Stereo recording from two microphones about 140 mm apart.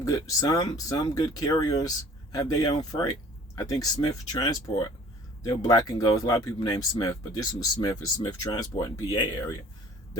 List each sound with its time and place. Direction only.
0.0 s speech: 25° left (ahead or behind)